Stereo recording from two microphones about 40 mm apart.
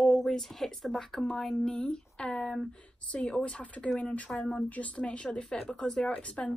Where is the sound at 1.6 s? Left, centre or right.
Left.